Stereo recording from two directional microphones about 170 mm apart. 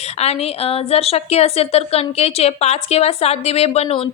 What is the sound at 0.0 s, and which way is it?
A woman's voice, 40° left (ahead or behind).